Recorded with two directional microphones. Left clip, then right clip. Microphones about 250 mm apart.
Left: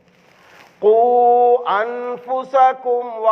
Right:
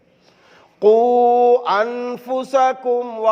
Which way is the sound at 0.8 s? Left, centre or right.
Right.